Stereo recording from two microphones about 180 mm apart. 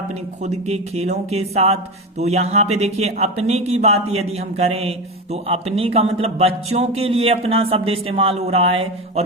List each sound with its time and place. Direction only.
0.4 s speech: 35° right (ahead or behind)